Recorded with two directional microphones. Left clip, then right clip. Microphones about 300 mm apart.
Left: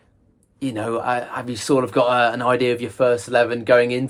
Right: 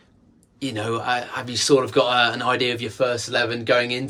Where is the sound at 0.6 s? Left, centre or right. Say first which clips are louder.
Left 2 dB; centre.